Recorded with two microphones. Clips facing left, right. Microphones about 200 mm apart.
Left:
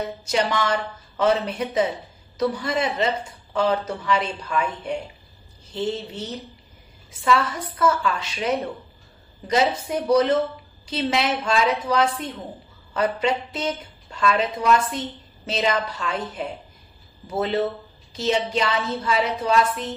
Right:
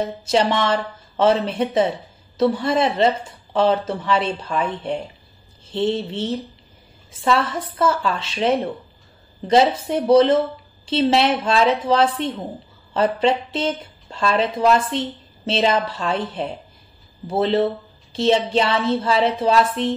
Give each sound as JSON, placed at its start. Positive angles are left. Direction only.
{"t": 0.3, "sound": "a woman's voice", "side_deg": -30}
{"t": 17.3, "sound": "a woman's voice", "side_deg": -30}